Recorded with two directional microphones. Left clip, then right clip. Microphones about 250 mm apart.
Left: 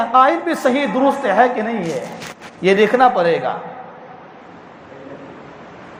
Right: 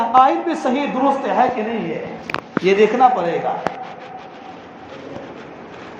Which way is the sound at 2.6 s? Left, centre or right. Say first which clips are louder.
Left 1 dB; left.